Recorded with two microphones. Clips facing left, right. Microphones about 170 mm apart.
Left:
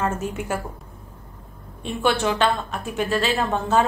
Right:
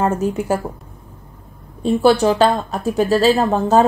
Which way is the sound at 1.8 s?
35° right (ahead or behind).